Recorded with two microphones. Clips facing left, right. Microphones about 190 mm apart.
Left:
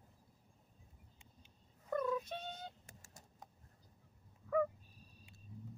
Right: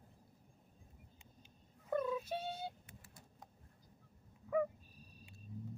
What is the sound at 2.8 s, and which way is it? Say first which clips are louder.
Telephone dialing: right 1 dB; 45° left (ahead or behind).